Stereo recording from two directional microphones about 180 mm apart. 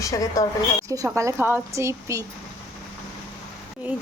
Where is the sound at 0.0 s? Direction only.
20° left (ahead or behind).